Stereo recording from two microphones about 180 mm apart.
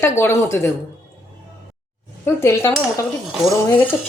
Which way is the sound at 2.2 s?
15° left (ahead or behind).